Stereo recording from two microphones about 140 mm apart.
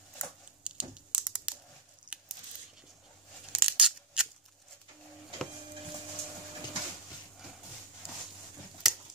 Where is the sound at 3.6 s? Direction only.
5° right (ahead or behind).